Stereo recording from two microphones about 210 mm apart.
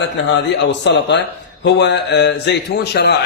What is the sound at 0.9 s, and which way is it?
A man's voice, 55° left (ahead or behind).